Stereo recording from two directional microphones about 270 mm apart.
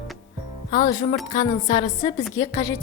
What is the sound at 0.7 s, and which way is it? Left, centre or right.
A woman's voice, centre.